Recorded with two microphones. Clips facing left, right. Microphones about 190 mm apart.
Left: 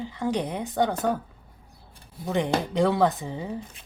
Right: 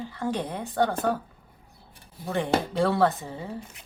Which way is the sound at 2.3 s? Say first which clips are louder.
Left 1 dB; 20° left (ahead or behind).